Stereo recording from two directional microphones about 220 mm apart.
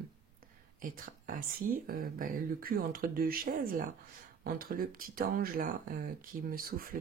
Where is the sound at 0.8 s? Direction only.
40° right (ahead or behind).